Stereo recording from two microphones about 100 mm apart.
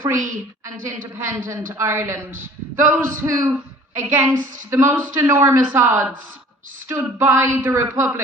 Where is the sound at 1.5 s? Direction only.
30° right (ahead or behind).